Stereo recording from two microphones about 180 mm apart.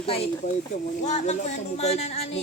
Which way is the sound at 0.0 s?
35° left (ahead or behind).